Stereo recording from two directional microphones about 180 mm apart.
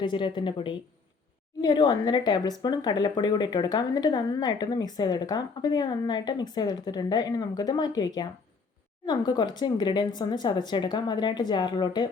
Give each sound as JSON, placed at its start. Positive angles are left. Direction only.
{"t": 0.0, "sound": "speech", "side_deg": 25}